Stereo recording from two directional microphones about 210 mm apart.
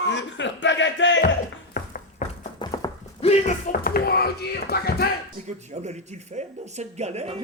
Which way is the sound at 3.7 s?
45° left (ahead or behind).